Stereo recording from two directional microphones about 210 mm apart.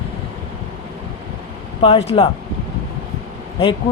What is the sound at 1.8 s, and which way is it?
Speech, 30° left (ahead or behind).